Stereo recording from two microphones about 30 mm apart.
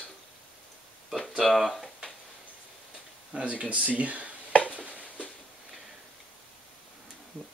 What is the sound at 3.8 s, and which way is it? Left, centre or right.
Speech, right.